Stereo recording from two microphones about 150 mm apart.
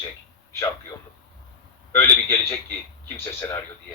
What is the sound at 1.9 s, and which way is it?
Speech, 15° left (ahead or behind).